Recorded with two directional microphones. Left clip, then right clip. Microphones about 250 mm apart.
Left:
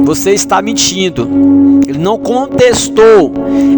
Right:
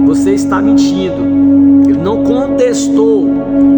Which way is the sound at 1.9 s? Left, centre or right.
Left.